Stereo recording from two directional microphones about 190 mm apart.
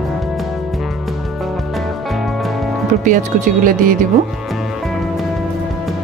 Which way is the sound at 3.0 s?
45° right (ahead or behind).